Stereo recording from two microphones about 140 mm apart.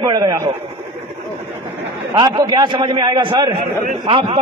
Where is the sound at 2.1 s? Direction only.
30° right (ahead or behind).